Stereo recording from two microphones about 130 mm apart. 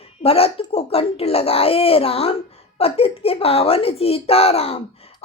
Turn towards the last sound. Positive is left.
turn(degrees=50)  # may be behind; listen again after turning